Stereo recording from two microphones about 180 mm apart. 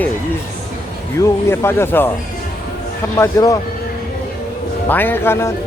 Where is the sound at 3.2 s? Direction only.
20° left (ahead or behind).